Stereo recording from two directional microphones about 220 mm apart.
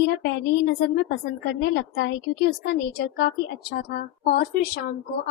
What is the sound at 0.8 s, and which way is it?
Speech, 45° left (ahead or behind).